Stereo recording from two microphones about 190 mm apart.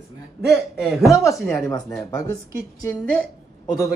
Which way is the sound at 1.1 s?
15° left (ahead or behind).